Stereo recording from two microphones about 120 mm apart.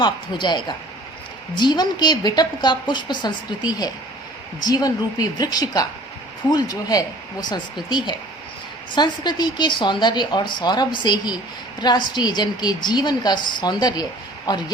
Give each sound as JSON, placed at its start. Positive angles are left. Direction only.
{"t": 0.0, "sound": "a woman's voice", "side_deg": 40}